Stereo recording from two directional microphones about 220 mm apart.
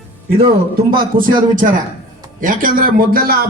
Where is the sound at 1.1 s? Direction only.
40° right (ahead or behind).